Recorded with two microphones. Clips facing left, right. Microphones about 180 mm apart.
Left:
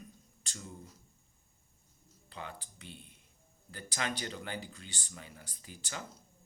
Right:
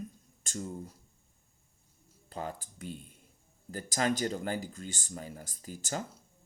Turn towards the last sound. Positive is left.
turn(degrees=-40)  # may be behind; listen again after turning